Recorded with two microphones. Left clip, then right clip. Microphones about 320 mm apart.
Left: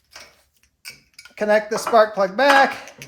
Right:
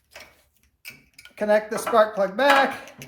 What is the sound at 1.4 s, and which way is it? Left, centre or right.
Speech, left.